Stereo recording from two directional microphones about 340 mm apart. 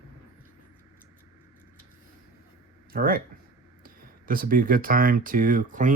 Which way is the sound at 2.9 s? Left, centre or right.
Right.